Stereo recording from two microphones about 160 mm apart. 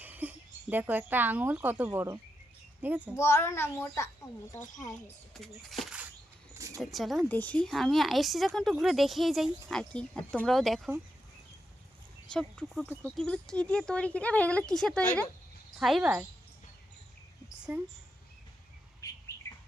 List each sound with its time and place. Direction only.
0.0 s a child's voice: 10° right (ahead or behind)
3.2 s speech: 20° left (ahead or behind)
5.3 s speech: centre (ahead or behind)
6.6 s a sound: 20° right (ahead or behind)
6.9 s speech: centre (ahead or behind)
12.3 s speech: 5° left (ahead or behind)
15.8 s speech: 5° right (ahead or behind)
17.7 s a child's voice: 10° right (ahead or behind)
19.0 s bird: 20° left (ahead or behind)